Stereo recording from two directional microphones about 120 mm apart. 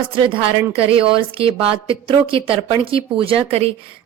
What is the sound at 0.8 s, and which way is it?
A woman's voice, 50° right (ahead or behind).